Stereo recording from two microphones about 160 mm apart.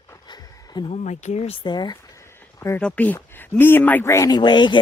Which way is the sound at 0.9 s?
45° left (ahead or behind).